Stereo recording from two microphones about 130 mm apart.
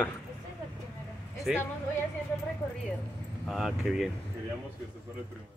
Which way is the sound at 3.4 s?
Centre (ahead or behind).